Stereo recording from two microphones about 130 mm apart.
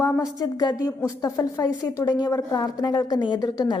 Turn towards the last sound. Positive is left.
turn(degrees=30)  # may be behind; listen again after turning